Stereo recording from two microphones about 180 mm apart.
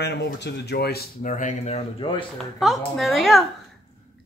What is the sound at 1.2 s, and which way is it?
Speech, 45° left (ahead or behind).